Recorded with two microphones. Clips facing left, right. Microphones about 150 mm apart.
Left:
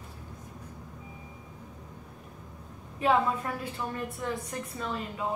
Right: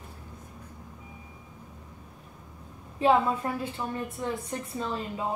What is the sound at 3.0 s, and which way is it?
A woman's voice, 30° right (ahead or behind).